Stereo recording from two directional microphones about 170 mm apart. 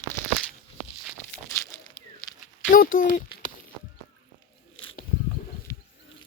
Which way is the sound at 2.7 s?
55° left (ahead or behind).